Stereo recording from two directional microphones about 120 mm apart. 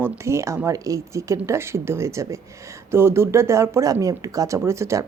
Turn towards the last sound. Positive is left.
turn(degrees=-25)  # may be behind; listen again after turning